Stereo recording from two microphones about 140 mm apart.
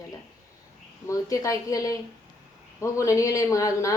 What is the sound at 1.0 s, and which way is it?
A woman's voice, 25° left (ahead or behind).